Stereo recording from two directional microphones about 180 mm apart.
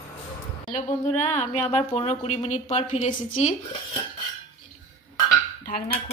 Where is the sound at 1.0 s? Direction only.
40° left (ahead or behind).